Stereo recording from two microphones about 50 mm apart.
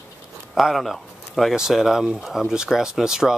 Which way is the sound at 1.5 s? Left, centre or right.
Centre.